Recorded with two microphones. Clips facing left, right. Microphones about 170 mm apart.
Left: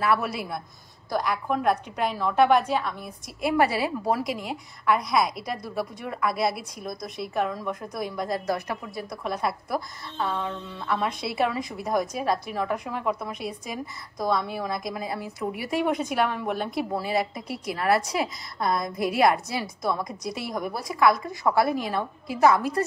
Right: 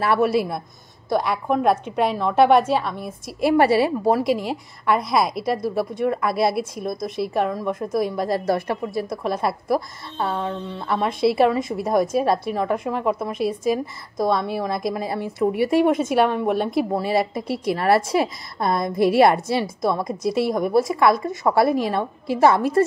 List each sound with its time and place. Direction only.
0.0 s a woman's voice: 30° right (ahead or behind)